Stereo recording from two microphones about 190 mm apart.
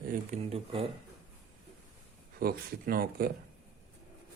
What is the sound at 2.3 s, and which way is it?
Speech, 50° right (ahead or behind).